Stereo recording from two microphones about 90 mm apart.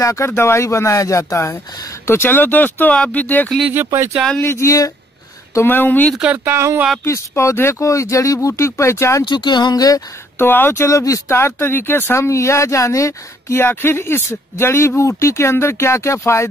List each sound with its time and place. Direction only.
0.0 s speech: 35° left (ahead or behind); by 3.4 s 20° left (ahead or behind)
3.7 s speech: 30° right (ahead or behind)
4.4 s speech: 30° left (ahead or behind)
5.5 s speech: 25° left (ahead or behind)
6.1 s speech: 10° right (ahead or behind)
6.4 s speech: 30° right (ahead or behind)
7.1 s speech: 35° left (ahead or behind)
9.2 s speech: 55° left (ahead or behind)
10.4 s speech: 25° left (ahead or behind)